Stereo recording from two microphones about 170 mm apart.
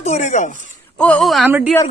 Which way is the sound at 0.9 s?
5° left (ahead or behind).